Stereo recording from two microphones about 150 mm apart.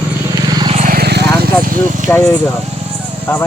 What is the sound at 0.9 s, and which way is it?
Vehicle, 90° right.